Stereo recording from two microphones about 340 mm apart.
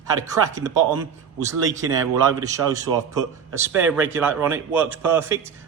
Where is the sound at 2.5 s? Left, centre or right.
Centre.